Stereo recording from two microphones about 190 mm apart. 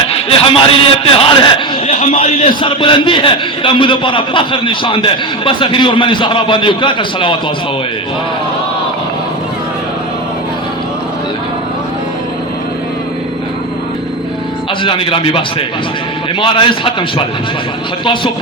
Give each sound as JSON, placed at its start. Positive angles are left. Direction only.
{"t": 0.1, "sound": "a man's voice", "side_deg": 30}
{"t": 14.8, "sound": "a man's voice", "side_deg": 25}